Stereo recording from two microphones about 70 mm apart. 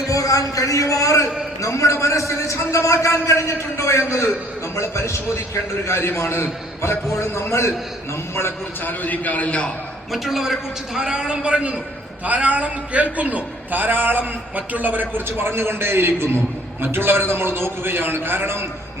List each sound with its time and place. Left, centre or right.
0.1 s a man's voice: left; by 9.7 s centre
10.1 s a man's voice: centre; by 15.0 s right
15.4 s a man's voice: right